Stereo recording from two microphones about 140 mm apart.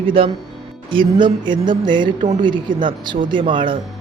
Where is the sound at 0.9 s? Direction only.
35° right (ahead or behind).